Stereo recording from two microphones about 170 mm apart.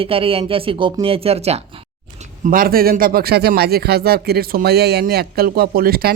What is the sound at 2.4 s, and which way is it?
A man's voice, 55° right (ahead or behind).